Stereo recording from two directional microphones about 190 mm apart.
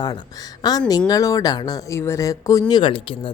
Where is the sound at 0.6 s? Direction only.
20° left (ahead or behind).